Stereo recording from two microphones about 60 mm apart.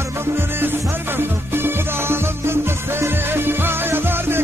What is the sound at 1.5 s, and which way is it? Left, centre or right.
Music, right.